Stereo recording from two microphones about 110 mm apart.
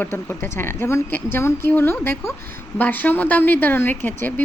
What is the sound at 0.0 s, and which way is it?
A woman's voice, 20° left (ahead or behind).